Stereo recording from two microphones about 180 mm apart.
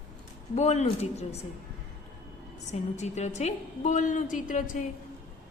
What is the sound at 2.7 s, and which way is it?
A woman's voice, 40° left (ahead or behind).